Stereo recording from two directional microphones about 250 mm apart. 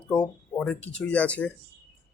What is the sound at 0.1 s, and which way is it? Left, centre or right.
Speech, centre.